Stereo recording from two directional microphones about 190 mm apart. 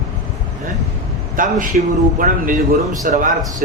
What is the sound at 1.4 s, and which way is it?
Speech, 45° right (ahead or behind).